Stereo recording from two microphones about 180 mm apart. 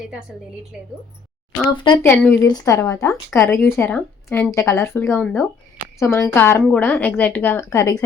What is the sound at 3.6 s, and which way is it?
A woman's voice, 15° left (ahead or behind).